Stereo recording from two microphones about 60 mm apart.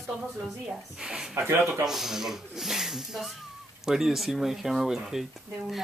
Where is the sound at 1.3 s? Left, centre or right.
Right.